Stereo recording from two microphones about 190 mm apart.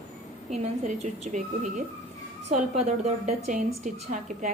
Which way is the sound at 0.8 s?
40° right (ahead or behind).